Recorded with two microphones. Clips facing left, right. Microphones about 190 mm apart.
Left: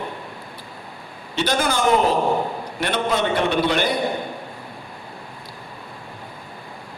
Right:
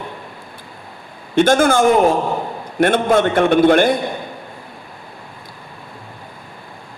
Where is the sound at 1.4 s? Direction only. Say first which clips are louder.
Right 9 dB; 50° right (ahead or behind).